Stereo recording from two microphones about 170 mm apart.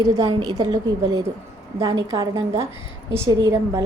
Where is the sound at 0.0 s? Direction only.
20° right (ahead or behind).